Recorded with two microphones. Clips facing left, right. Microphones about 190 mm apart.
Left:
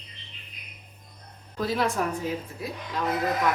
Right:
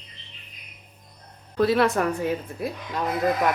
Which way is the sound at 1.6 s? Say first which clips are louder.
Right 6 dB; 65° right (ahead or behind).